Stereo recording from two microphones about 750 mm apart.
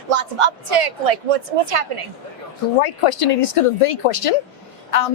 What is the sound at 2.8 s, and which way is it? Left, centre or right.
Speech, left.